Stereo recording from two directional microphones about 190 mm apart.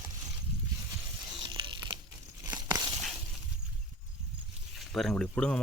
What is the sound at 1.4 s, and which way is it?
Tearing, 25° right (ahead or behind).